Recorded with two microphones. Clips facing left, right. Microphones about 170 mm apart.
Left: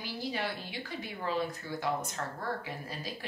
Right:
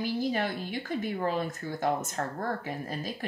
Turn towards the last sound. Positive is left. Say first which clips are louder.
# right 5 dB
turn(degrees=-45)  # may be behind; listen again after turning